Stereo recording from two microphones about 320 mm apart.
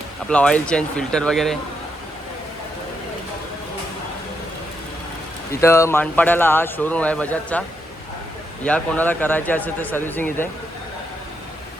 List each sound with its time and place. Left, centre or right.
0.3 s speech: centre
5.5 s speech: centre
8.6 s speech: centre